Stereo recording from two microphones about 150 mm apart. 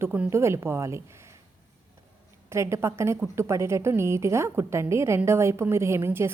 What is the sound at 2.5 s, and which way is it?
A woman's voice, 20° right (ahead or behind).